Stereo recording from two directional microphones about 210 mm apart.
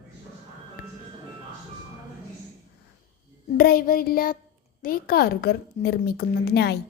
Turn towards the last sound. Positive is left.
turn(degrees=50)  # may be behind; listen again after turning